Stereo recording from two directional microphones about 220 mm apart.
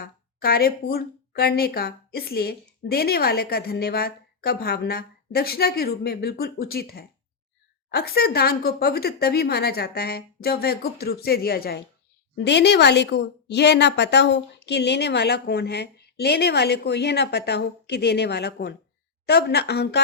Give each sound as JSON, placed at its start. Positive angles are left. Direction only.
{"t": 0.0, "sound": "a woman's voice", "side_deg": 45}